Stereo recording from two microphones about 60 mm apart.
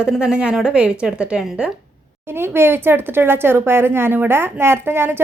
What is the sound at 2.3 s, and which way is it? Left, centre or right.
A woman's voice, right.